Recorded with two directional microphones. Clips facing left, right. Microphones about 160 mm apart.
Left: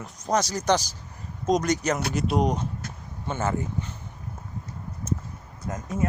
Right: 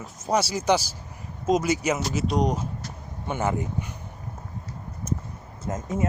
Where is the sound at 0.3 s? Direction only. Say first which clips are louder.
Right 1 dB; 10° right (ahead or behind).